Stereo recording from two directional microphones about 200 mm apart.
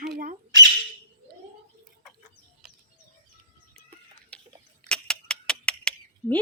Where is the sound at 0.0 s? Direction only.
50° right (ahead or behind).